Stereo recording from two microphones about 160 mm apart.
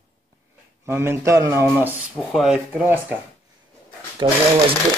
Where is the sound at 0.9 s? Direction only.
15° right (ahead or behind).